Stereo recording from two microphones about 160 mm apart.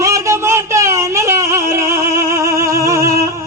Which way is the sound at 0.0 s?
20° right (ahead or behind).